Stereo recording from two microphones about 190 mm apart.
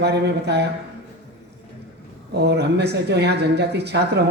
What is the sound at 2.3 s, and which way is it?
Speech, 60° right (ahead or behind).